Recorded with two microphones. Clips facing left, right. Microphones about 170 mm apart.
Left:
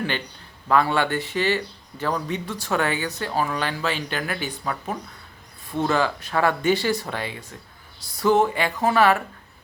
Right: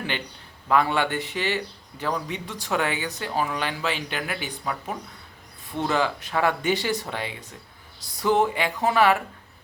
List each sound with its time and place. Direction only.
0.7 s speech: 15° right (ahead or behind)